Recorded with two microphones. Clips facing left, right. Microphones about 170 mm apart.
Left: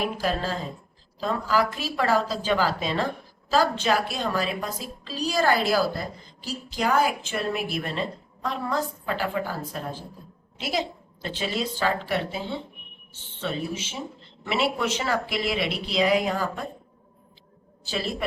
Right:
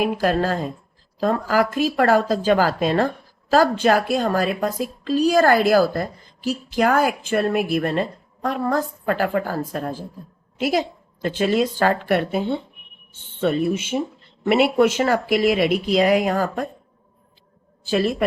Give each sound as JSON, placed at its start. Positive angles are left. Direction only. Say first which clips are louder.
{"t": 0.0, "sound": "a woman's voice", "louder": "right 7 dB", "side_deg": -50}
{"t": 17.8, "sound": "a woman's voice", "louder": "right 9 dB", "side_deg": -50}